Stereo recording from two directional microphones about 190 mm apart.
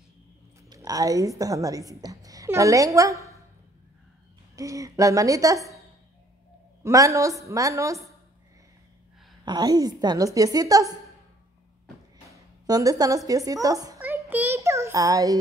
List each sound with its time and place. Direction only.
0.7 s a woman's voice: 20° right (ahead or behind)
4.6 s a woman's voice: 15° right (ahead or behind)
6.8 s a woman's voice: 15° right (ahead or behind)
9.4 s a woman's voice: 20° right (ahead or behind)
12.3 s a sound: 20° right (ahead or behind)
13.3 s a child's voice: 20° right (ahead or behind)